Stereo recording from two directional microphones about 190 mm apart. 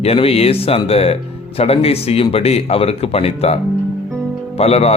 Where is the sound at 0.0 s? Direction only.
30° left (ahead or behind).